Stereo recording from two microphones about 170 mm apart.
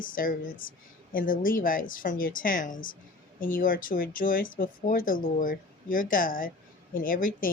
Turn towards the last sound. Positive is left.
turn(degrees=55)  # may be behind; listen again after turning